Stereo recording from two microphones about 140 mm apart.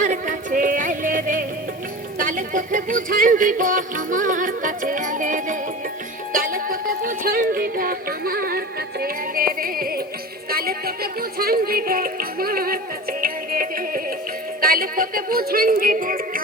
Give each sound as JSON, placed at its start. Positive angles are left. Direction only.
{"t": 0.0, "sound": "music", "side_deg": -65}
{"t": 6.3, "sound": "music", "side_deg": -90}